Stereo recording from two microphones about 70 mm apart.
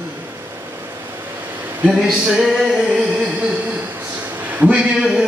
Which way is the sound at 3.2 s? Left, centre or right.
Centre.